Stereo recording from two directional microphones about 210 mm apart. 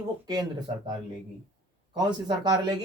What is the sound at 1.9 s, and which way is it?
Speech, 20° right (ahead or behind).